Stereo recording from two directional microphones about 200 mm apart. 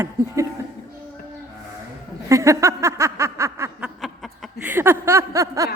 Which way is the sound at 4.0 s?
Centre (ahead or behind).